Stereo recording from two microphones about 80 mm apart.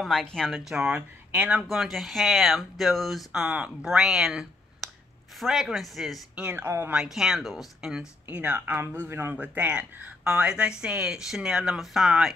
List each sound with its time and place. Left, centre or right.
0.0 s speech: centre
0.8 s speech: centre
6.5 s speech: right
6.9 s speech: centre
8.3 s speech: centre